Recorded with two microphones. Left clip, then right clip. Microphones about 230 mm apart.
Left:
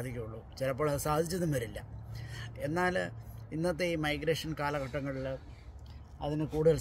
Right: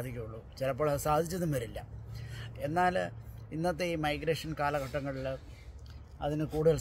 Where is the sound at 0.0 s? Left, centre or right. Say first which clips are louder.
Even; centre.